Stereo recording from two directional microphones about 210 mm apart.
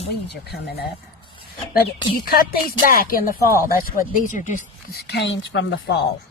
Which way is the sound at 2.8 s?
45° left (ahead or behind).